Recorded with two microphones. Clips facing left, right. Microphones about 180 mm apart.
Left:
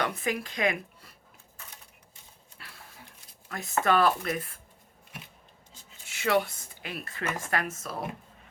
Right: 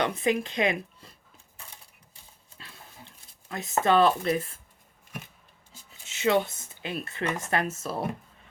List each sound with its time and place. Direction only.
0.0 s speech: 20° right (ahead or behind)
2.6 s dog: 25° right (ahead or behind)
3.5 s speech: 25° right (ahead or behind)
6.1 s speech: 20° right (ahead or behind)